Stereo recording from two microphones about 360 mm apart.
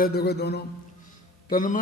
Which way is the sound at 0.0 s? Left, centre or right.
Left.